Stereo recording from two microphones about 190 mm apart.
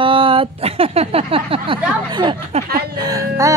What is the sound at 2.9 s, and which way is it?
Speech, 20° right (ahead or behind).